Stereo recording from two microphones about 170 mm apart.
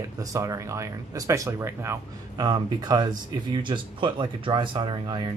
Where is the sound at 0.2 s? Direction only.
20° right (ahead or behind).